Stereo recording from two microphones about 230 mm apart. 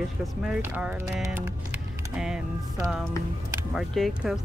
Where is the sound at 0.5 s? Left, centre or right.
Centre.